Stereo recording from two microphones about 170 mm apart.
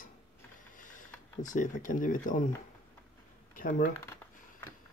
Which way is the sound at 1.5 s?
50° left (ahead or behind).